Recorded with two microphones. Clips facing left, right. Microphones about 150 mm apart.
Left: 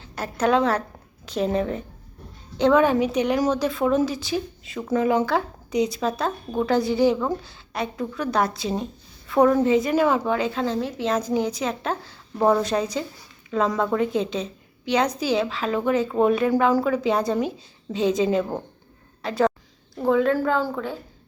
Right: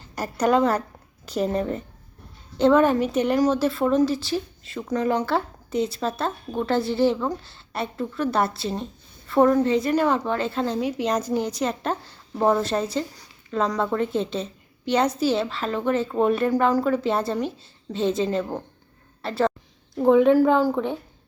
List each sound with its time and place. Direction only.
0.0 s a woman's voice: 10° right (ahead or behind)
11.1 s a woman's voice: 5° left (ahead or behind)
20.0 s a woman's voice: 20° right (ahead or behind)